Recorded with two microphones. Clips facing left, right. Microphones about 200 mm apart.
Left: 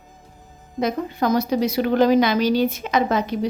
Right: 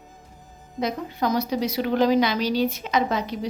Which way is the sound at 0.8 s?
50° left (ahead or behind).